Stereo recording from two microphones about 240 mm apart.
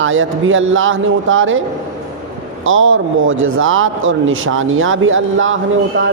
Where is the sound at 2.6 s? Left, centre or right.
Right.